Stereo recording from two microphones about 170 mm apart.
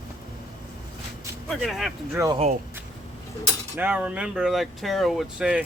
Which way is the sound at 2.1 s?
15° right (ahead or behind).